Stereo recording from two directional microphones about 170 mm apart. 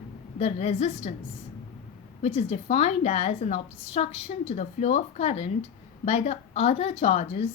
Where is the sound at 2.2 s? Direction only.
35° left (ahead or behind).